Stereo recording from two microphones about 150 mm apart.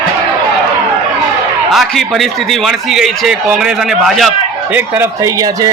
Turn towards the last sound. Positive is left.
turn(degrees=-25)  # may be behind; listen again after turning